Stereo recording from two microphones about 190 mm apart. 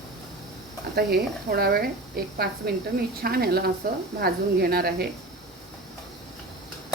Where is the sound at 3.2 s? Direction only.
55° right (ahead or behind).